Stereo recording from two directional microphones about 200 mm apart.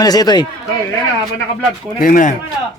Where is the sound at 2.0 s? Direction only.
45° left (ahead or behind).